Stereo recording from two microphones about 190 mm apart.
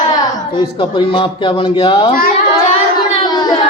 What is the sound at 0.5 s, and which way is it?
A man's voice, 25° left (ahead or behind).